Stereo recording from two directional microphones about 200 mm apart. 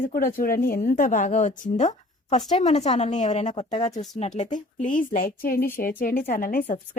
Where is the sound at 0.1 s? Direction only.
45° left (ahead or behind).